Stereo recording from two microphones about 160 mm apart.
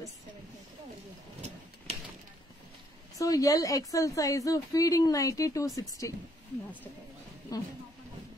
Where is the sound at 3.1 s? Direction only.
20° left (ahead or behind).